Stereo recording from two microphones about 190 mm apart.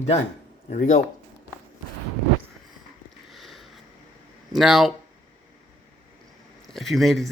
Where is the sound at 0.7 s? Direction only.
40° left (ahead or behind).